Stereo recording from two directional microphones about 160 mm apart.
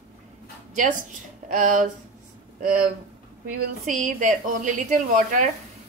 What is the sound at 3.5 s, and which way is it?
A woman's voice, 55° right (ahead or behind).